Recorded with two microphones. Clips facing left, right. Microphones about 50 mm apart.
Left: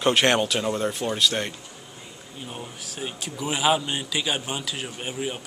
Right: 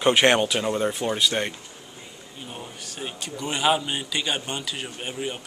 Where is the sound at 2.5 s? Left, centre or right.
Centre.